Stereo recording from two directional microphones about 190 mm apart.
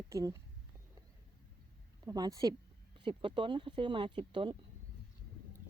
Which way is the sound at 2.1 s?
20° right (ahead or behind).